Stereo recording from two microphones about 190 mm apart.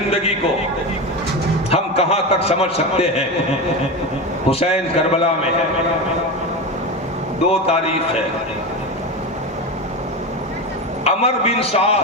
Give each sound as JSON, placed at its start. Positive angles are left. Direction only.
{"t": 0.1, "sound": "a man's voice", "side_deg": 30}
{"t": 1.7, "sound": "a man's voice", "side_deg": 30}
{"t": 7.5, "sound": "a man's voice", "side_deg": 30}
{"t": 11.0, "sound": "a man's voice", "side_deg": 30}